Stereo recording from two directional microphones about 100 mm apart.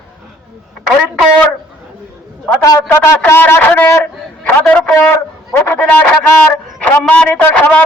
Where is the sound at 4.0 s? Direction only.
15° left (ahead or behind).